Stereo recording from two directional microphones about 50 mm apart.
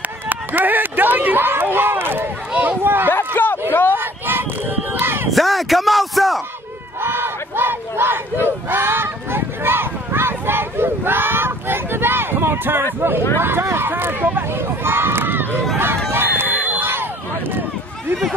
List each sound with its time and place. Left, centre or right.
0.3 s speech: right
3.1 s speech: left
3.9 s a sound: right
5.3 s speech: centre
7.0 s battle cry: right
13.4 s speech: right
16.1 s a sound: right